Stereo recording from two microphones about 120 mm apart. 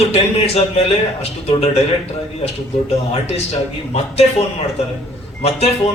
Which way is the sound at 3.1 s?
60° left (ahead or behind).